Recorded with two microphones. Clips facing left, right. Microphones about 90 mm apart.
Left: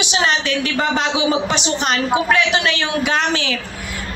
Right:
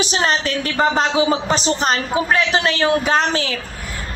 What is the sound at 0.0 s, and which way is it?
A man's voice, 40° right (ahead or behind).